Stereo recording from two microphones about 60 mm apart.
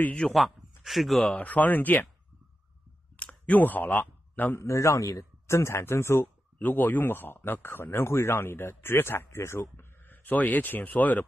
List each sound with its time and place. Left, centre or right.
0.3 s speech: centre
1.3 s speech: left
3.2 s a sound: left
4.6 s speech: left
6.2 s speech: left
10.0 s speech: left